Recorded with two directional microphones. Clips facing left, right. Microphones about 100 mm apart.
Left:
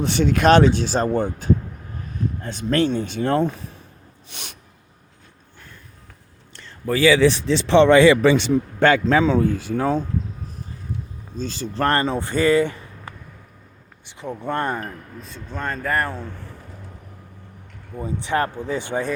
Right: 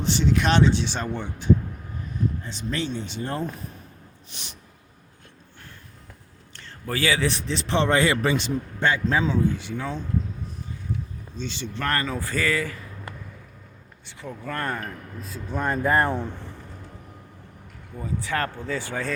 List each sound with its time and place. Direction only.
0.0 s speech: 55° left (ahead or behind)
2.4 s speech: 55° left (ahead or behind)
3.2 s speech: 70° left (ahead or behind)
7.3 s a man's voice: 85° left; by 9.5 s 70° left (ahead or behind)
9.5 s speech: 45° left (ahead or behind)
11.3 s speech: 40° left (ahead or behind)
14.2 s speech: 25° left (ahead or behind)
15.4 s speech: 15° right (ahead or behind)
17.9 s speech: 20° left (ahead or behind)